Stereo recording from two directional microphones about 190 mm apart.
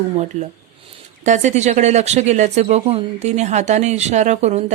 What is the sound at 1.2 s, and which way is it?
A woman's voice, 40° right (ahead or behind).